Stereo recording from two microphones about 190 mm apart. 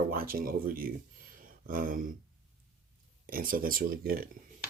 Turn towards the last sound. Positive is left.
turn(degrees=-50)  # may be behind; listen again after turning